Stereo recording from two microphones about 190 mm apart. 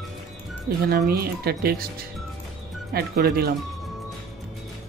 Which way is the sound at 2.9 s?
55° right (ahead or behind).